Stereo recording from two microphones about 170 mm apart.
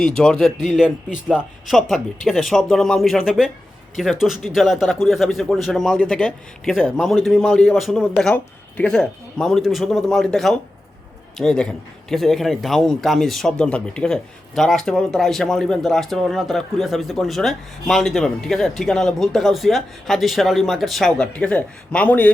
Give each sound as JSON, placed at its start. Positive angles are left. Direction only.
{"t": 0.0, "sound": "a man's voice", "side_deg": 5}